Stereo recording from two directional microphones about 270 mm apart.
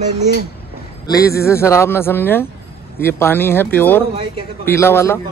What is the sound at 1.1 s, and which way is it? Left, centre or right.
Speech, centre.